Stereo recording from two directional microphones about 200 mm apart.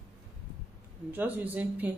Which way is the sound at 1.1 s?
10° right (ahead or behind).